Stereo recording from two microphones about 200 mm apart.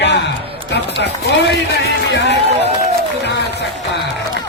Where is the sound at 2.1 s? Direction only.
60° left (ahead or behind).